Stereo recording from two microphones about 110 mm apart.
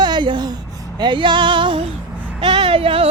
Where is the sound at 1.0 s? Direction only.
45° right (ahead or behind).